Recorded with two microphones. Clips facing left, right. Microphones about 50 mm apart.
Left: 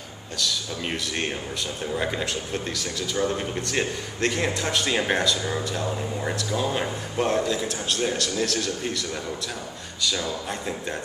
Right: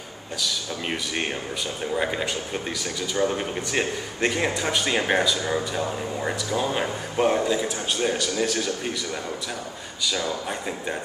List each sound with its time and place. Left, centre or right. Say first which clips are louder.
0.4 s speech: left 1 dB; centre